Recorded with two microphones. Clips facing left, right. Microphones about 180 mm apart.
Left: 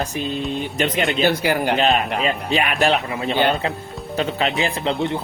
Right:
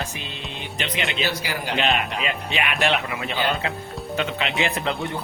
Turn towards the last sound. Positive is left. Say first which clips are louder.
# left 4 dB
turn(degrees=25)  # may be behind; listen again after turning